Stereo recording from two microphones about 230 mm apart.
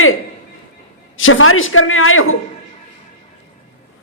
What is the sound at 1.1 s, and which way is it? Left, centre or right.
A man's voice, left.